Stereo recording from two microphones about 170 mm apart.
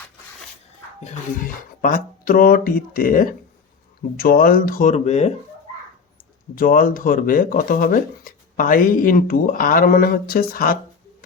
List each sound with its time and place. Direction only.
1.0 s speech: 50° left (ahead or behind)
6.6 s speech: 55° left (ahead or behind)